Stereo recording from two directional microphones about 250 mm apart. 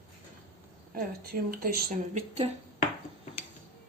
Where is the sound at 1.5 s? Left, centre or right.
Right.